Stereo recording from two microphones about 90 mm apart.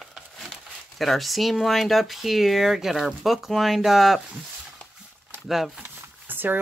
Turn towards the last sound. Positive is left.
turn(degrees=-20)  # may be behind; listen again after turning